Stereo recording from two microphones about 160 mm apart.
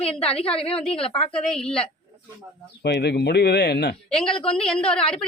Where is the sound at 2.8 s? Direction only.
90° left.